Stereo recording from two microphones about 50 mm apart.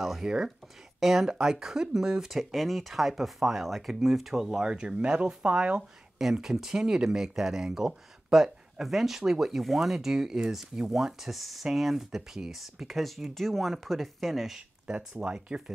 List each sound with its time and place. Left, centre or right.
0.0 s speech: centre
6.1 s speech: centre
14.9 s speech: right